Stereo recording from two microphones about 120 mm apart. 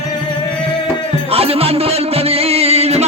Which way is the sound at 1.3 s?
55° right (ahead or behind).